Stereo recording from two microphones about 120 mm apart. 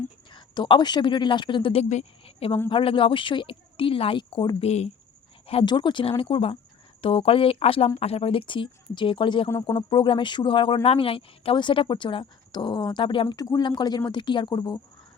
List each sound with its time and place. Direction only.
0.3 s speech: 40° left (ahead or behind)
1.8 s a woman's voice: 65° left (ahead or behind); by 9.5 s 45° left (ahead or behind)
9.5 s speech: 30° left (ahead or behind)
9.9 s a woman's voice: 45° left (ahead or behind)
13.2 s speech: 30° left (ahead or behind)